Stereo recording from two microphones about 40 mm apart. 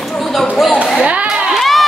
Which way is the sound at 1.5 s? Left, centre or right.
Centre.